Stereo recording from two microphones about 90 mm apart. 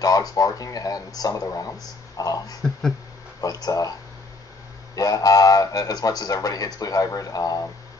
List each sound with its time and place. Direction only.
0.0 s speech: 45° left (ahead or behind)
3.6 s speech: 45° left (ahead or behind)
4.9 s speech: 40° left (ahead or behind)